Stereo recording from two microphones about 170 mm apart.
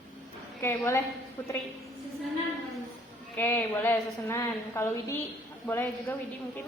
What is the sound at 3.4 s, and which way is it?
A woman's voice, 10° left (ahead or behind).